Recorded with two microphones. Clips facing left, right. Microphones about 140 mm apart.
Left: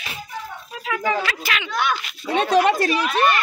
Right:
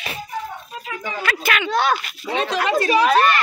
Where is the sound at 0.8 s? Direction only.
90° left.